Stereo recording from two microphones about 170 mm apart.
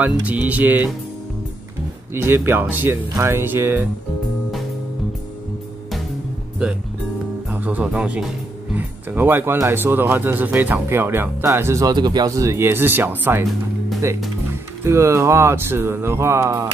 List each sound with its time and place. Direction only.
0.0 s speech: 10° right (ahead or behind)
2.1 s speech: 15° right (ahead or behind)
7.5 s speech: 10° right (ahead or behind)
14.9 s speech: 15° right (ahead or behind)